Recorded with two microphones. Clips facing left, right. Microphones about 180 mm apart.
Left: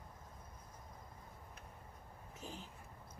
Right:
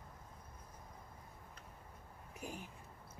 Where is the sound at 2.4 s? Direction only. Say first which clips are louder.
Right 3 dB; 15° right (ahead or behind).